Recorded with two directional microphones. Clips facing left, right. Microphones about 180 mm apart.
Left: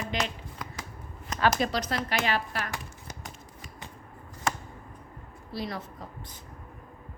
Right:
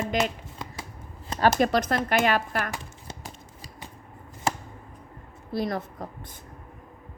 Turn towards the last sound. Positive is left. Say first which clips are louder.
# right 6 dB
turn(degrees=-50)  # may be behind; listen again after turning